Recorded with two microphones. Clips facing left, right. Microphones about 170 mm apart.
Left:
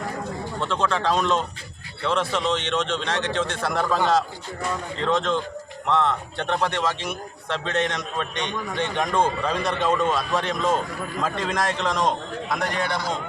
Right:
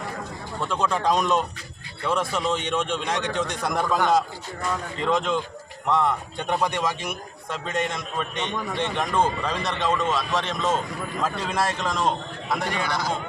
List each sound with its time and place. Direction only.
0.6 s a man's voice: 10° right (ahead or behind)